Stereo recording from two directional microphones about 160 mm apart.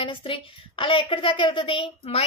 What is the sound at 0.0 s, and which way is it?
A woman's voice, 30° left (ahead or behind).